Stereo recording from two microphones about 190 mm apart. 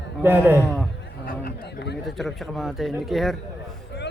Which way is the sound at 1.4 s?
60° left (ahead or behind).